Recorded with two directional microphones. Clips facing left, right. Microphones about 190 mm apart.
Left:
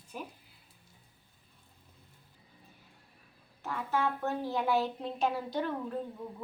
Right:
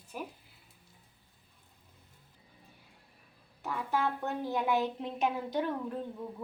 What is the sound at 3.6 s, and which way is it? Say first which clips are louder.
A woman's voice: even; 15° right (ahead or behind).